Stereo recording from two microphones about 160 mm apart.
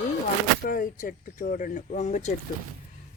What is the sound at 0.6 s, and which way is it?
Speech, 60° left (ahead or behind).